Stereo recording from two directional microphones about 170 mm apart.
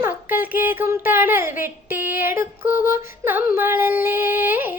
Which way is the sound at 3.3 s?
10° right (ahead or behind).